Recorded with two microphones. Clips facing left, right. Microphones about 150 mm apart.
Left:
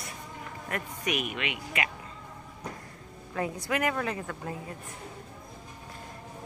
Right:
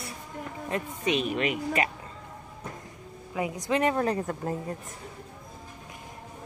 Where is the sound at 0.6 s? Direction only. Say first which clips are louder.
Right 4 dB; 25° right (ahead or behind).